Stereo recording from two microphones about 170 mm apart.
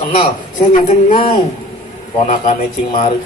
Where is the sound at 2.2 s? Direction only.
40° left (ahead or behind).